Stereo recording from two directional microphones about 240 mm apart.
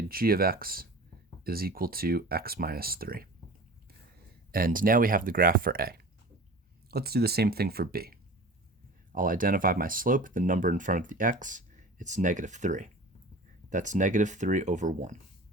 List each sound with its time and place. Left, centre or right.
0.1 s speech: right
4.5 s speech: right